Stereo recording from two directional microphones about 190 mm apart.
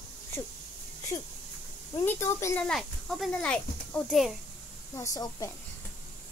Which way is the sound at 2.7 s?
Centre (ahead or behind).